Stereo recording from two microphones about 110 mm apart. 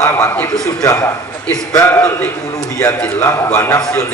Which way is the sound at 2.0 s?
20° left (ahead or behind).